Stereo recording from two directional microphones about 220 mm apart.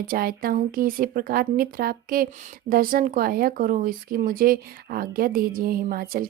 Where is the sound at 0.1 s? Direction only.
40° right (ahead or behind).